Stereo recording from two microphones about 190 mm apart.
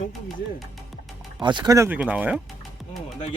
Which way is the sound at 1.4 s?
25° right (ahead or behind).